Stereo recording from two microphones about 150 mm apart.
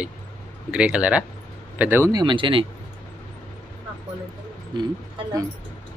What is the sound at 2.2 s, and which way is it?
Speech, 35° right (ahead or behind).